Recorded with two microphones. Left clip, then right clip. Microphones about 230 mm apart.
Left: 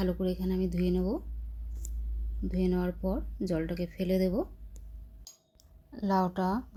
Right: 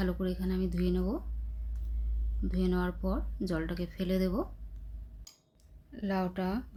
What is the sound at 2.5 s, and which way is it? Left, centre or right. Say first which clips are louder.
Speech: left 2 dB; centre.